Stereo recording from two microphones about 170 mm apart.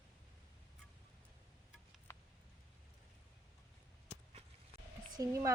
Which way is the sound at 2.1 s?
15° left (ahead or behind).